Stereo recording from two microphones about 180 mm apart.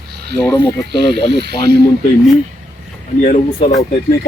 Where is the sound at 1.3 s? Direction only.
65° right (ahead or behind).